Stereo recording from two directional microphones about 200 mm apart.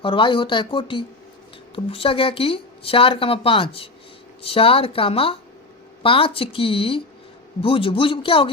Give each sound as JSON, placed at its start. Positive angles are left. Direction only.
{"t": 0.0, "sound": "speech", "side_deg": 25}